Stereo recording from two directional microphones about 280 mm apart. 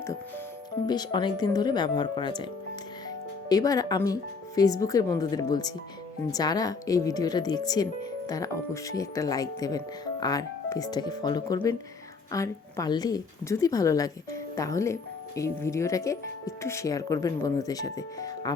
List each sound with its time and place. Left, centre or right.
0.9 s speech: centre
3.5 s speech: centre